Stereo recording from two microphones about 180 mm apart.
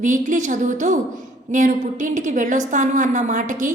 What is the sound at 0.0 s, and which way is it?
A woman's voice, 45° right (ahead or behind).